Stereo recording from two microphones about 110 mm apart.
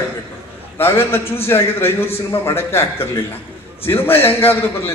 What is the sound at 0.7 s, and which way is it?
A man's voice, 20° left (ahead or behind).